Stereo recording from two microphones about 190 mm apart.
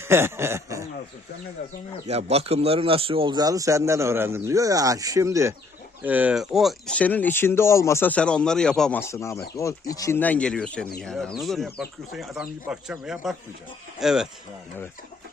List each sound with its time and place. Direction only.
0.0 s speech: 15° right (ahead or behind)
2.0 s speech: 35° right (ahead or behind); by 14.3 s centre (ahead or behind)